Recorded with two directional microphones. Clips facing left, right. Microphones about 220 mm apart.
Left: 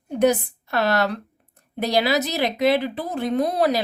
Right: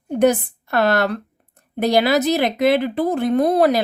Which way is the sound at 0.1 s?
50° right (ahead or behind).